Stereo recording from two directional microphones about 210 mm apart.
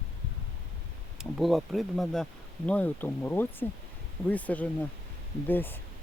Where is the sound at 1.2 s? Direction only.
Centre (ahead or behind).